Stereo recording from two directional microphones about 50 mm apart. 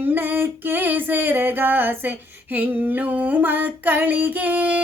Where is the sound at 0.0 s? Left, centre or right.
Right.